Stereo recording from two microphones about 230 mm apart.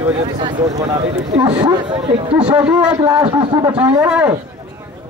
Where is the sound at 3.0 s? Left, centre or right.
Centre.